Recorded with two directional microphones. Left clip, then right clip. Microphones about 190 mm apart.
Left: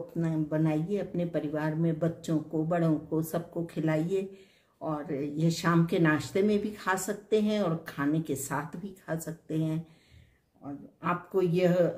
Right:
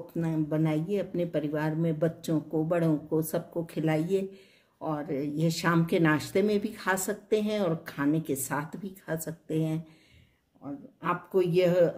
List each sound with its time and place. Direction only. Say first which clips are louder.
0.2 s speech: right 1 dB; 45° right (ahead or behind)